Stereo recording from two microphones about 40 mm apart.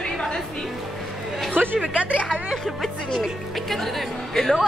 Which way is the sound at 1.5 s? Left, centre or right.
Right.